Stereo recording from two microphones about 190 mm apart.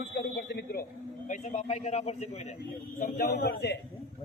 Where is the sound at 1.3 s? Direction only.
35° left (ahead or behind).